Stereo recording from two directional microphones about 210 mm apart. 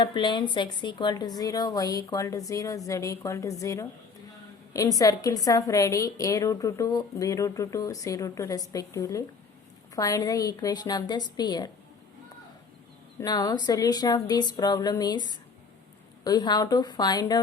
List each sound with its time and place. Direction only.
0.0 s a woman's voice: 20° left (ahead or behind)
13.1 s speech: 15° left (ahead or behind)